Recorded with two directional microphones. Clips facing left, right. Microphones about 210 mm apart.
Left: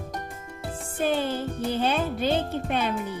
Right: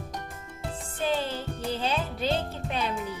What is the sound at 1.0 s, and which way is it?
Music, 55° left (ahead or behind).